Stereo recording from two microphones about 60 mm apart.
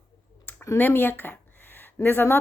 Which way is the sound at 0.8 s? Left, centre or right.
Left.